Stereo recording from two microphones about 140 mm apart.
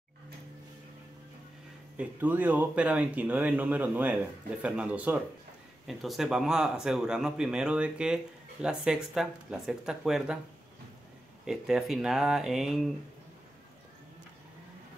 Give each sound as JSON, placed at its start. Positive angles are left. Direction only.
{"t": 2.0, "sound": "speech", "side_deg": -10}
{"t": 11.4, "sound": "speech", "side_deg": -5}